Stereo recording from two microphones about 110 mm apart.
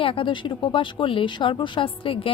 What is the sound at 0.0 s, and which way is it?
Speech, 55° left (ahead or behind).